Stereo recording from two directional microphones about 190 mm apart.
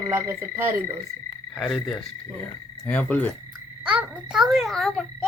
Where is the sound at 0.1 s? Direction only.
15° right (ahead or behind).